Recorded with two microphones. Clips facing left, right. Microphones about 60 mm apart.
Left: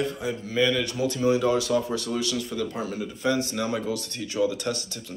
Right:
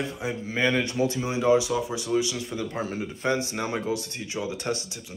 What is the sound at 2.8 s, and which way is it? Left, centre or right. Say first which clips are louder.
Speech: even; right.